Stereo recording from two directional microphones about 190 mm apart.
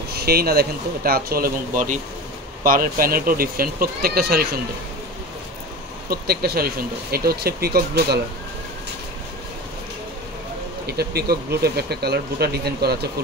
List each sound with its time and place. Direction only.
0.1 s speech: 55° right (ahead or behind)
6.0 s speech: 55° right (ahead or behind)
10.9 s speech: 55° right (ahead or behind)